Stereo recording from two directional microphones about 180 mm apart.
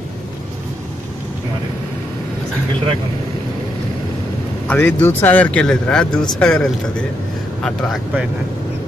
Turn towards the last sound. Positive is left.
turn(degrees=5)  # may be behind; listen again after turning